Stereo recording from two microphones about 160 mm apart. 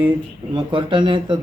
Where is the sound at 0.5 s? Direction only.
30° right (ahead or behind).